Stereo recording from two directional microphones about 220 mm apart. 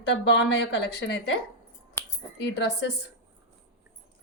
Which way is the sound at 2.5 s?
50° left (ahead or behind).